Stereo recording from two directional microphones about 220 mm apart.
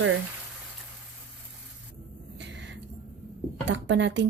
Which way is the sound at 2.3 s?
55° right (ahead or behind).